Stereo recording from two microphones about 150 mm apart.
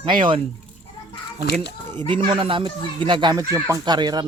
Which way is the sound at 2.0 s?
35° right (ahead or behind).